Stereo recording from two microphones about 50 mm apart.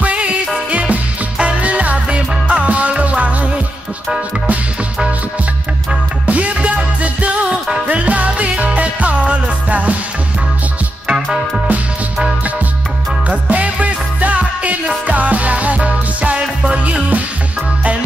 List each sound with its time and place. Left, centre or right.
0.0 s music: right
6.2 s music: right
13.3 s music: right